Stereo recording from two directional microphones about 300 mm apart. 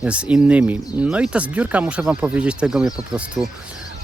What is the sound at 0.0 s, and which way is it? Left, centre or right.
Speech, centre.